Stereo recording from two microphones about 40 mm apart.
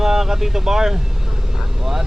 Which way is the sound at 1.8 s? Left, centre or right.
Centre.